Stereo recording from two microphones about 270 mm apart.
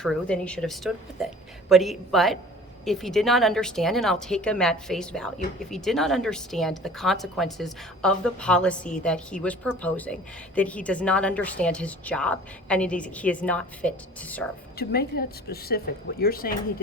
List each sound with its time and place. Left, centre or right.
0.0 s a woman's voice: centre
14.8 s a woman's voice: left